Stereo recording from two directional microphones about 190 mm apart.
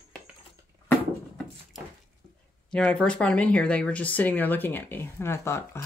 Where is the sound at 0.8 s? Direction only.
5° left (ahead or behind).